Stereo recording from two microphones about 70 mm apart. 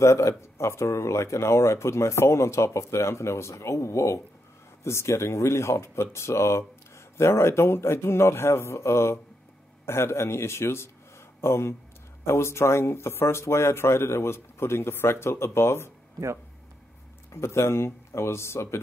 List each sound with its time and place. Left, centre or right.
0.0 s speech: left
17.3 s speech: left